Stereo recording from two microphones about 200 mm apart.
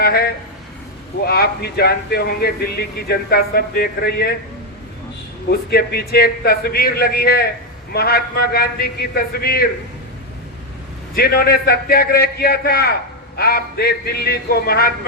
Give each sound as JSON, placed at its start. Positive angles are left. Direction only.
{"t": 0.0, "sound": "speech", "side_deg": 50}
{"t": 1.3, "sound": "a man's voice", "side_deg": 50}
{"t": 5.5, "sound": "a man's voice", "side_deg": 50}
{"t": 11.1, "sound": "a man's voice", "side_deg": 50}